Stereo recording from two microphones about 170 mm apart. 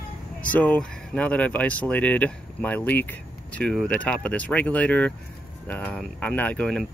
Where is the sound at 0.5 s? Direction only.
10° left (ahead or behind).